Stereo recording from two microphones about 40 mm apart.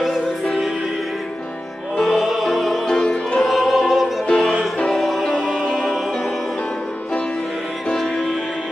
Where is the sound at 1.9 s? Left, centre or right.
Centre.